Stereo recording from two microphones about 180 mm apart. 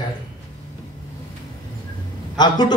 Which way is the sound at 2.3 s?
25° left (ahead or behind).